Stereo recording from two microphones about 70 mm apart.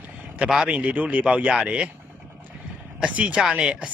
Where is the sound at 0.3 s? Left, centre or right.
Centre.